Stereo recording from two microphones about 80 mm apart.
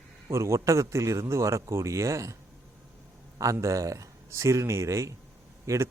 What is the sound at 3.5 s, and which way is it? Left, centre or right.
A man's voice, right.